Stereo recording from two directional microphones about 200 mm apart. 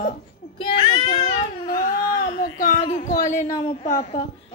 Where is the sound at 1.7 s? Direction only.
40° left (ahead or behind).